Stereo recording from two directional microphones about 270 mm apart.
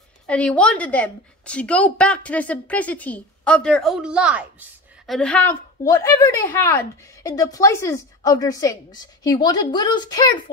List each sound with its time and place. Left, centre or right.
0.3 s a woman's voice: centre